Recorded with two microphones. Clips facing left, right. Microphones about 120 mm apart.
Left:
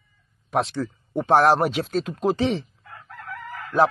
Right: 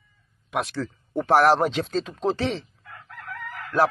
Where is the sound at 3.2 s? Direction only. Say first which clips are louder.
Left 1 dB; 20° left (ahead or behind).